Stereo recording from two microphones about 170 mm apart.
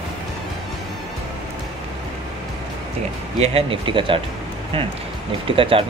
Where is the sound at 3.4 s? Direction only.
35° right (ahead or behind).